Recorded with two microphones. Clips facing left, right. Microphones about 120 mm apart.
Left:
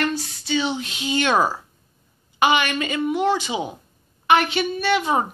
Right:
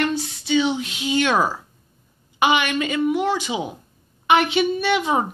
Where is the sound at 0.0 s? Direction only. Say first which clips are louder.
Right 2 dB; 20° right (ahead or behind).